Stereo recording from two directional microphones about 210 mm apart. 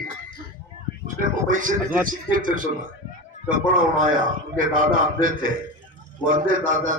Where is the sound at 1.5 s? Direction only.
40° right (ahead or behind).